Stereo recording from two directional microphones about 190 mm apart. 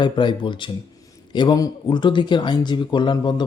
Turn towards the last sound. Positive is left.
turn(degrees=25)  # may be behind; listen again after turning